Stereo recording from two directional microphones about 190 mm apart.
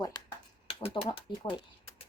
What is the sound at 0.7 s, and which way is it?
Speech, 30° left (ahead or behind).